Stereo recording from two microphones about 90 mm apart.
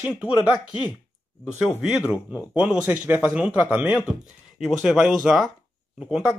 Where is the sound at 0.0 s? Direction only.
10° right (ahead or behind).